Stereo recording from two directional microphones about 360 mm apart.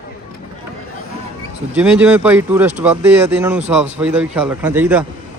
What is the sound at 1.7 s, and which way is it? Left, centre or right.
Speech, centre.